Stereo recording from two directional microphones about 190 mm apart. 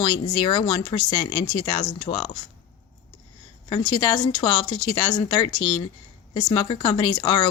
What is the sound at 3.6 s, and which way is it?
Speech, 25° left (ahead or behind).